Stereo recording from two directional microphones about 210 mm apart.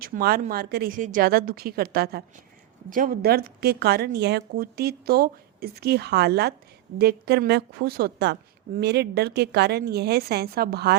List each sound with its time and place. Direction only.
0.0 s a woman's voice: 45° right (ahead or behind)